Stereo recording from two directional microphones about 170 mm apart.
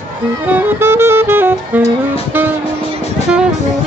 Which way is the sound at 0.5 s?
15° right (ahead or behind).